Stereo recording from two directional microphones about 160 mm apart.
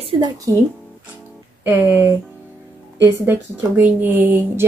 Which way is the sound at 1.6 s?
15° right (ahead or behind).